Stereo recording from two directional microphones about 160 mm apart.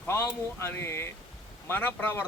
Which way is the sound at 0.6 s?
15° left (ahead or behind).